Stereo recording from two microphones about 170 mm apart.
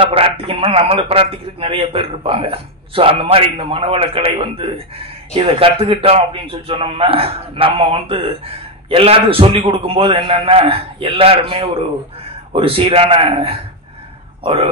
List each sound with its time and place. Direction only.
0.0 s a man's voice: 35° right (ahead or behind)